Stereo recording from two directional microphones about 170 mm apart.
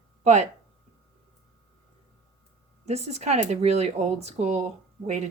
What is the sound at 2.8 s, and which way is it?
Speech, 40° right (ahead or behind).